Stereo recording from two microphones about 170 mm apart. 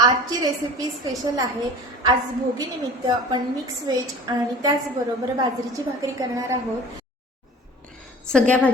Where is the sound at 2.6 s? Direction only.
25° right (ahead or behind).